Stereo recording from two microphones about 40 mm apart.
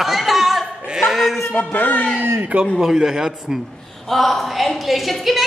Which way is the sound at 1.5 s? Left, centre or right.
Left.